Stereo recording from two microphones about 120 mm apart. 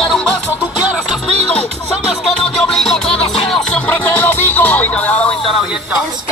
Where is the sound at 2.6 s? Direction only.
5° left (ahead or behind).